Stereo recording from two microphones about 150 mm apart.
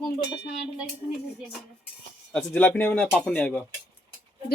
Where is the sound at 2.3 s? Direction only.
15° left (ahead or behind).